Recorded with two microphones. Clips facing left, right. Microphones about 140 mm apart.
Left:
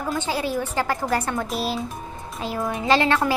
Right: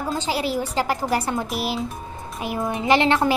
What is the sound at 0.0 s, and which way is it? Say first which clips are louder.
A woman's voice: right 1 dB; 15° right (ahead or behind).